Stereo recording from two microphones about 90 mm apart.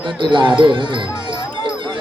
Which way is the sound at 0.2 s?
60° right (ahead or behind).